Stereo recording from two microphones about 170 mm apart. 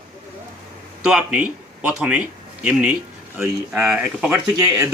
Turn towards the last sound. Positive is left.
turn(degrees=-20)  # may be behind; listen again after turning